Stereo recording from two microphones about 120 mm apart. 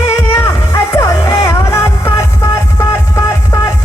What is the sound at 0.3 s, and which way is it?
Music, 25° left (ahead or behind).